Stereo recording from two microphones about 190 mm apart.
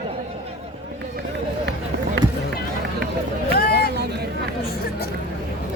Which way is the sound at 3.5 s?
55° left (ahead or behind).